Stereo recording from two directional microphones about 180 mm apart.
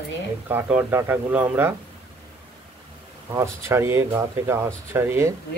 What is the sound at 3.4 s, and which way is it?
Speech, 15° right (ahead or behind).